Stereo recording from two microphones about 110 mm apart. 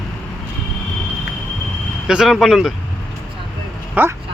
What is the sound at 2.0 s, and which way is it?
Speech, 5° right (ahead or behind).